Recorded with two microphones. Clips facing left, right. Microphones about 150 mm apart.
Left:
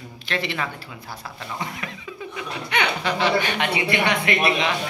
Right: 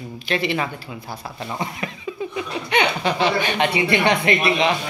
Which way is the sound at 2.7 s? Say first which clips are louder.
Right 4 dB; 20° right (ahead or behind).